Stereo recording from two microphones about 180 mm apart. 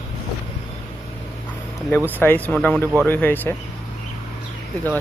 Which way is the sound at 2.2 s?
10° left (ahead or behind).